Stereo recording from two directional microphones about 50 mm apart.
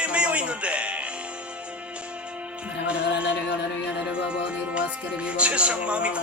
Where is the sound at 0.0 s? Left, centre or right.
Right.